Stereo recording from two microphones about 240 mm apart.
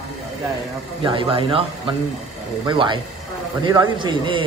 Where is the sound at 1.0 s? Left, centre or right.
Right.